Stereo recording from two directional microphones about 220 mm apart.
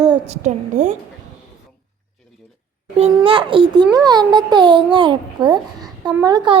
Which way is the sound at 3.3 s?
25° right (ahead or behind).